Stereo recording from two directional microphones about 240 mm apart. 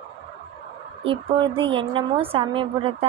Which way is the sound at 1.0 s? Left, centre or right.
Right.